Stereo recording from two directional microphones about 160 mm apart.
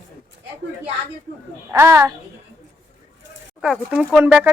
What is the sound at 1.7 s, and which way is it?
Speech, 15° right (ahead or behind).